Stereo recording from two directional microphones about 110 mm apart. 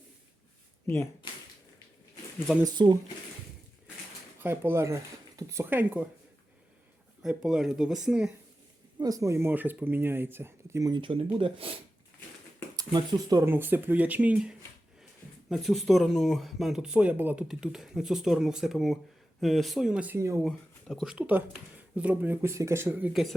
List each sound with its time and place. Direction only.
1.2 s shuffling cards: 45° left (ahead or behind)
2.6 s speech: 40° right (ahead or behind)
4.4 s speech: 20° right (ahead or behind)
7.2 s speech: 5° right (ahead or behind)
9.0 s speech: 35° right (ahead or behind)
10.9 s speech: 50° right (ahead or behind)
12.7 s speech: 35° right (ahead or behind)
13.4 s speech: 20° right (ahead or behind)
15.4 s speech: centre (ahead or behind)
17.5 s speech: 5° right (ahead or behind)
20.1 s speech: 25° right (ahead or behind)
20.5 s a sound: 10° left (ahead or behind)
21.0 s speech: 10° right (ahead or behind)